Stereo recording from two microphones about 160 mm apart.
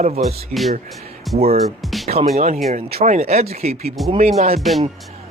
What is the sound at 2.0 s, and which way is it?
Speech, 40° right (ahead or behind).